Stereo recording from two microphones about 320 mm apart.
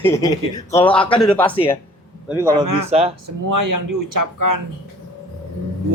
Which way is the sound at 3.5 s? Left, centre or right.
Right.